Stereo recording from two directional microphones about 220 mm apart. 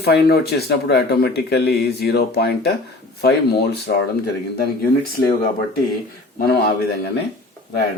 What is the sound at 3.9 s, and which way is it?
Speech, 45° left (ahead or behind).